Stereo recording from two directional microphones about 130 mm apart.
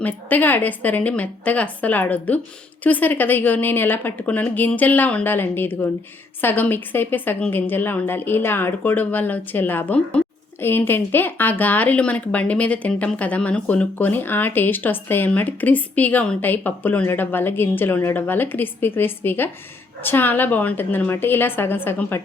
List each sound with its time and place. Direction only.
0.0 s speech: 15° left (ahead or behind)